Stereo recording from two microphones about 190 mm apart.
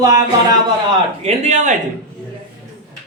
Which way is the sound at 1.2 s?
35° right (ahead or behind).